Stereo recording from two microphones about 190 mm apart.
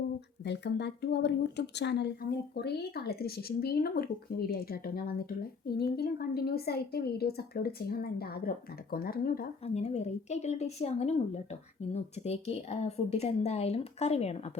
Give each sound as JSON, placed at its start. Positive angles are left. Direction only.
{"t": 0.4, "sound": "speech", "side_deg": 65}
{"t": 9.6, "sound": "a woman's voice", "side_deg": 35}